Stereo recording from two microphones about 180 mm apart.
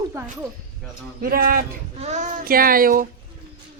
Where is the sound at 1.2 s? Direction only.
55° right (ahead or behind).